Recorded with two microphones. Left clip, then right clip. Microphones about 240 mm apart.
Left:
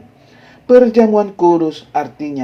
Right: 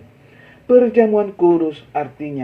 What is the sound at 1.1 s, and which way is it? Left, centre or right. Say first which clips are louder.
Speech: left 3 dB; left.